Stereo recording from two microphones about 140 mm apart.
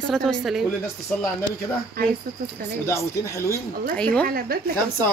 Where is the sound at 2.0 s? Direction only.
90° right.